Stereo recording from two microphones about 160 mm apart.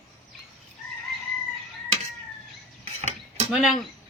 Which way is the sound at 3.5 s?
Centre (ahead or behind).